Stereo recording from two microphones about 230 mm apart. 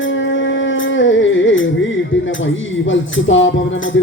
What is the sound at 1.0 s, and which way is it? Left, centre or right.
Music, left.